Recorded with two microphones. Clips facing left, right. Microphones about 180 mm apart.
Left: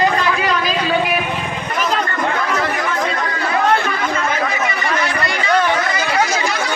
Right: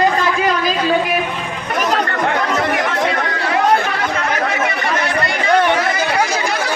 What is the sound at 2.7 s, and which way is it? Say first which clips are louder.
Chatter: right 3 dB; 75° right (ahead or behind).